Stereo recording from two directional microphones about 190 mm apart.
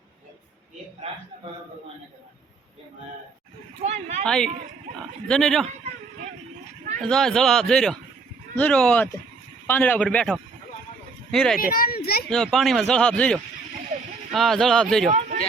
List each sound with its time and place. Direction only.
3.8 s speech: 35° right (ahead or behind)
4.2 s speech: 5° left (ahead or behind)
7.0 s a man's voice: centre (ahead or behind)
11.3 s speech: 5° left (ahead or behind)
11.6 s a child's voice: 50° left (ahead or behind)
12.3 s speech: centre (ahead or behind)
15.1 s speech: 40° right (ahead or behind)